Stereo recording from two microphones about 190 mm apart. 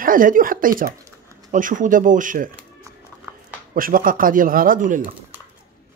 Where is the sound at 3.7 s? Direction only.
45° right (ahead or behind).